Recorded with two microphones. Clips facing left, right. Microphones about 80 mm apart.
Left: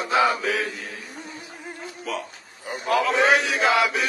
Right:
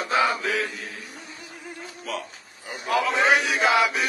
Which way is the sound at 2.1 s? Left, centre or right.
Centre.